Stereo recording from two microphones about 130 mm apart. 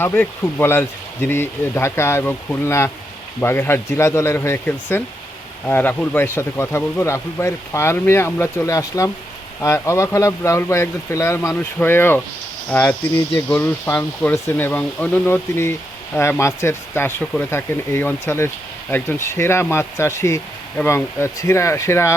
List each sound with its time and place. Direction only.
0.0 s speech: 15° left (ahead or behind)